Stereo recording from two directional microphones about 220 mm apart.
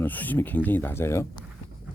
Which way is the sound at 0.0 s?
10° left (ahead or behind).